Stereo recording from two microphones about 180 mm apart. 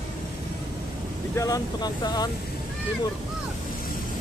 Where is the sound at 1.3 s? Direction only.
20° left (ahead or behind).